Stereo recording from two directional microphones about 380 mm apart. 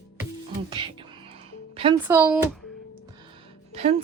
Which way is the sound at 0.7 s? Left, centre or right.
Centre.